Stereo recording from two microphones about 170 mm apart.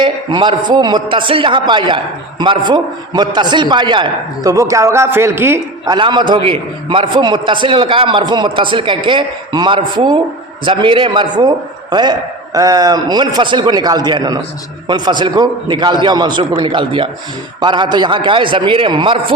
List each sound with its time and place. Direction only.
0.0 s a man's voice: 25° right (ahead or behind)